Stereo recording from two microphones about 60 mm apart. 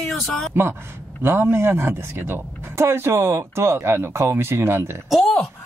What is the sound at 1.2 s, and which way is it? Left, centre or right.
A man's voice, right.